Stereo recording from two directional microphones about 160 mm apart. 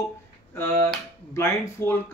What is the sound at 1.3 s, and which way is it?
Speech, 15° left (ahead or behind).